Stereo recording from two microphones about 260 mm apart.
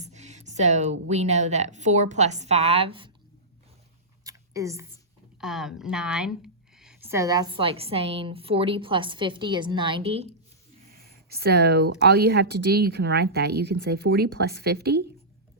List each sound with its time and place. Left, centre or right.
0.0 s speech: right
4.2 s a sound: centre
5.4 s speech: centre; by 10.2 s right
11.3 s speech: right